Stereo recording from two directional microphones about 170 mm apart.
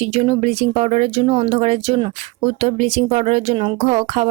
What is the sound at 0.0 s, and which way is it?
Speech, 40° right (ahead or behind).